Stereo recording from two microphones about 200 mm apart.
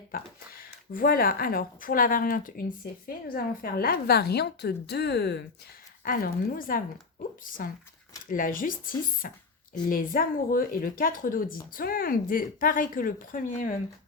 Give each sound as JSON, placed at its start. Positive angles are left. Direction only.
{"t": 0.1, "sound": "a woman's voice", "side_deg": 45}
{"t": 6.1, "sound": "a woman's voice", "side_deg": 45}